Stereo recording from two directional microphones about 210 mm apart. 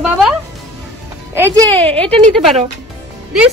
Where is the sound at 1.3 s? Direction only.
15° right (ahead or behind).